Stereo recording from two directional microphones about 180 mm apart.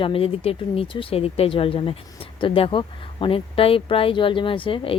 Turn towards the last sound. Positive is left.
turn(degrees=30)  # may be behind; listen again after turning